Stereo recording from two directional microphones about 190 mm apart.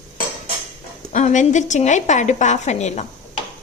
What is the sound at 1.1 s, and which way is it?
A woman's voice, 40° left (ahead or behind).